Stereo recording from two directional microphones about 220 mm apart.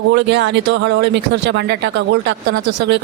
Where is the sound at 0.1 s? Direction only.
55° right (ahead or behind).